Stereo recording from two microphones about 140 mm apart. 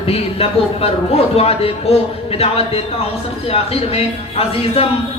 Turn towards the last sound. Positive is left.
turn(degrees=45)  # may be behind; listen again after turning